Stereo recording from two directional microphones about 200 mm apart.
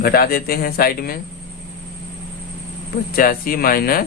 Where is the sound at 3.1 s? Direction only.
45° left (ahead or behind).